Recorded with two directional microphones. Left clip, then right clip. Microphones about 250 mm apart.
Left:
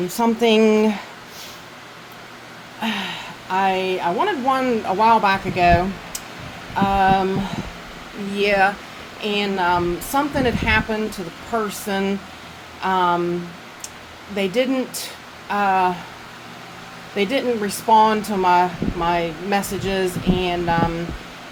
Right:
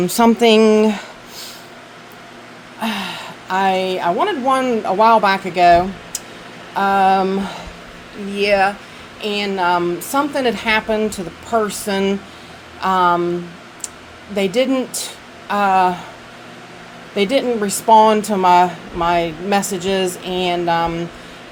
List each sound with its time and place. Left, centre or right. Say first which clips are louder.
0.1 s speech: right 5 dB; right; by 1.0 s centre
2.8 s speech: right 2 dB; centre
8.4 s speech: right 2 dB; centre
14.3 s speech: right 4 dB; right
17.2 s speech: right 4 dB; right